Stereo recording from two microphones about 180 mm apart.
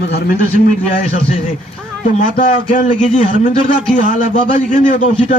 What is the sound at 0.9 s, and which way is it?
Speech, 50° left (ahead or behind).